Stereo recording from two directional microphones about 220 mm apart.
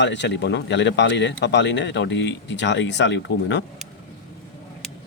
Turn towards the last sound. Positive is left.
turn(degrees=55)  # may be behind; listen again after turning